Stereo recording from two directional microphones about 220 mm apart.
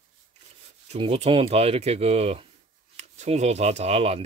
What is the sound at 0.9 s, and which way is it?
Speech, 25° right (ahead or behind).